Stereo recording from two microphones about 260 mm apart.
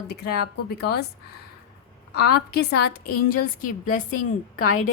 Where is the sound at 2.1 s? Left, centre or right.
Left.